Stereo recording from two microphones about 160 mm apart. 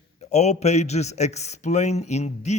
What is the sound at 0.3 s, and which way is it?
A man's voice, 45° left (ahead or behind).